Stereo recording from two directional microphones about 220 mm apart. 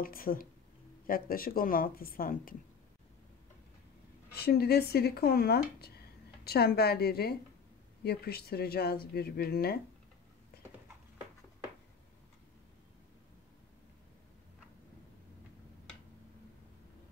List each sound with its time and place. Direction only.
0.0 s a woman's voice: 40° left (ahead or behind)
4.3 s speech: 45° left (ahead or behind)